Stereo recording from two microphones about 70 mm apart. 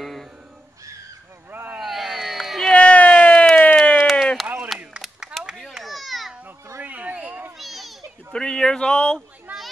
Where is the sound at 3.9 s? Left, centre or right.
Centre.